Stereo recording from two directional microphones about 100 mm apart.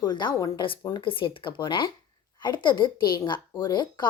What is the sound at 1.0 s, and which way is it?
A woman's voice, 60° left (ahead or behind).